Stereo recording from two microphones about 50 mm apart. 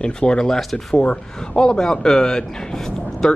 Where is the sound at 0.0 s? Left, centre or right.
Centre.